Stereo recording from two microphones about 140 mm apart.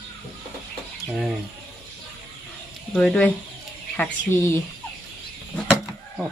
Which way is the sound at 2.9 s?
5° left (ahead or behind).